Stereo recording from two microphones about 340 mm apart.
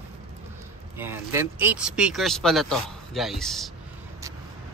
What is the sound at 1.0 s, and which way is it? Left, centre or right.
Speech, centre.